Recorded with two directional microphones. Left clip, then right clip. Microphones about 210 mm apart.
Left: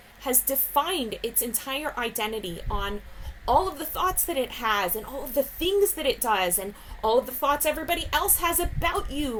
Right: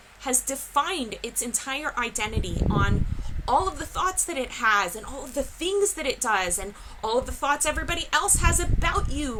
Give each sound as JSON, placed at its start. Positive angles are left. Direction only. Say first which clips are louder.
{"t": 0.3, "sound": "a woman's voice", "louder": "even", "side_deg": -10}